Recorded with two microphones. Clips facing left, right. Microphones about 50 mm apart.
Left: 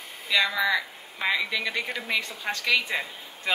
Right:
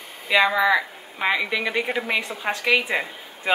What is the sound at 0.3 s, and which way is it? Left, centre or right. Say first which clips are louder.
A woman's voice: right 6 dB; right.